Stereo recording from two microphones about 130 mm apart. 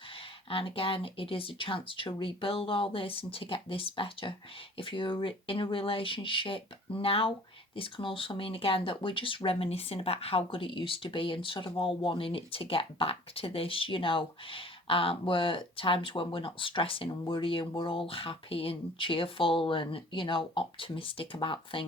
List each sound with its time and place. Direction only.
0.5 s speech: 45° left (ahead or behind)